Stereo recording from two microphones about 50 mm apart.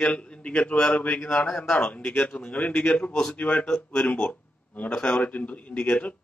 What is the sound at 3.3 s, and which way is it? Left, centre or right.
A man's voice, left.